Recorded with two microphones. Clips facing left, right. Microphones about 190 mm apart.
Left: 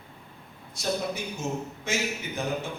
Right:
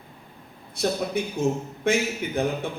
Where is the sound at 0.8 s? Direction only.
60° right (ahead or behind).